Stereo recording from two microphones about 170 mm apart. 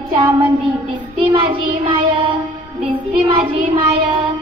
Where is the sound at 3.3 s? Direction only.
35° right (ahead or behind).